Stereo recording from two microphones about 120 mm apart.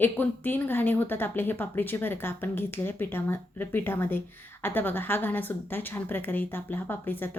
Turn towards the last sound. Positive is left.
turn(degrees=15)  # may be behind; listen again after turning